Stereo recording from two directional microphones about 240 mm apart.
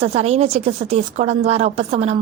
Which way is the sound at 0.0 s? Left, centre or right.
Right.